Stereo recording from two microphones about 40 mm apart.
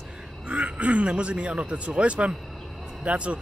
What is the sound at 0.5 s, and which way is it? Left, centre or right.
Speech, right.